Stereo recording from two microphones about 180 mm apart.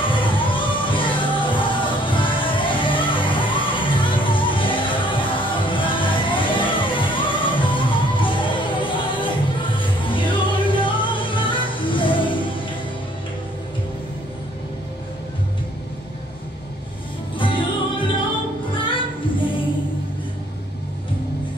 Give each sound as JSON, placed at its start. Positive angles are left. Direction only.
{"t": 0.0, "sound": "music", "side_deg": 25}
{"t": 17.4, "sound": "music", "side_deg": 30}